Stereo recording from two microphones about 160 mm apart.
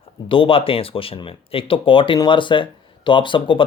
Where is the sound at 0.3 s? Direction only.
35° left (ahead or behind).